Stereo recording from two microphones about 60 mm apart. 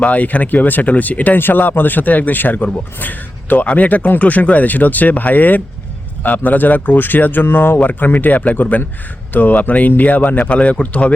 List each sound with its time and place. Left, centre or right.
0.0 s speech: left